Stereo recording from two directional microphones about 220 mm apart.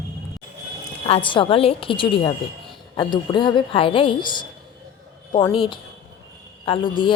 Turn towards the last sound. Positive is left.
turn(degrees=20)  # may be behind; listen again after turning